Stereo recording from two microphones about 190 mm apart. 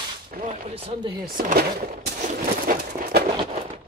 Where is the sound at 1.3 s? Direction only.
50° right (ahead or behind).